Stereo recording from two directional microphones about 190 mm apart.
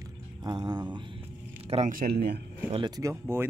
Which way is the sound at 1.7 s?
40° right (ahead or behind).